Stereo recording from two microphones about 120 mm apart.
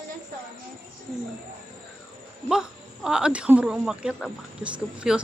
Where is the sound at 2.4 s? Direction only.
5° right (ahead or behind).